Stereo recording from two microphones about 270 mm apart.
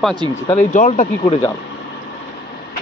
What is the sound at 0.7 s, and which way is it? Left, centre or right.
Speech, left.